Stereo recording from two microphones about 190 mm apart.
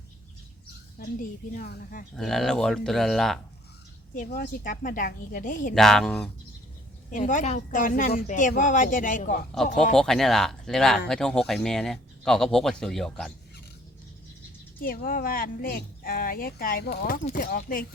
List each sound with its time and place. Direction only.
1.5 s speech: 50° left (ahead or behind)
2.1 s speech: centre (ahead or behind)
4.1 s speech: 45° left (ahead or behind)
5.7 s speech: centre (ahead or behind)
7.1 s speech: 45° left (ahead or behind)
9.9 s speech: centre (ahead or behind)
14.8 s speech: 45° left (ahead or behind)